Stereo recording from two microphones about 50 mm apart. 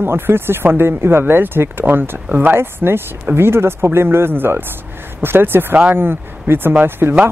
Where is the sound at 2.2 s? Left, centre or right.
Right.